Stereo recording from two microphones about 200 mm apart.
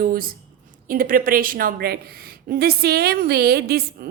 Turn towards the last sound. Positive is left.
turn(degrees=-50)  # may be behind; listen again after turning